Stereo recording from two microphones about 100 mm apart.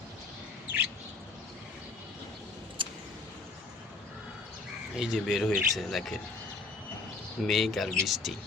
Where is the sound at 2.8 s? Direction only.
60° right (ahead or behind).